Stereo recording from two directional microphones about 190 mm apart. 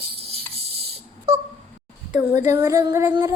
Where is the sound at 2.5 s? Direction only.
15° right (ahead or behind).